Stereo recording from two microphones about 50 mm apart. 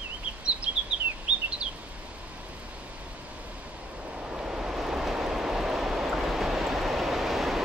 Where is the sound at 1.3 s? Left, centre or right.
Right.